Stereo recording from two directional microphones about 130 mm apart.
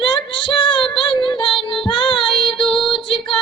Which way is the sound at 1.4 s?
40° left (ahead or behind).